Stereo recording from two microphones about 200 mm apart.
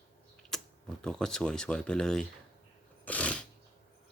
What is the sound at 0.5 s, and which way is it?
Typing, centre (ahead or behind).